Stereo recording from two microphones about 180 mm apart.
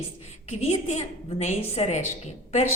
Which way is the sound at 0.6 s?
35° left (ahead or behind).